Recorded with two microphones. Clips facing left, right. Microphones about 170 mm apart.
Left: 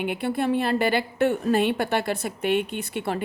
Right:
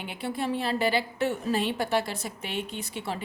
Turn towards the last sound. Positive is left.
turn(degrees=60)  # may be behind; listen again after turning